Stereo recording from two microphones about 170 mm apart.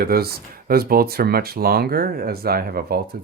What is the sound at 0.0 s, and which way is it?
Speech, 65° right (ahead or behind).